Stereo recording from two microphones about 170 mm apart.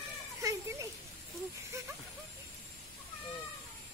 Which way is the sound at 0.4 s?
20° right (ahead or behind).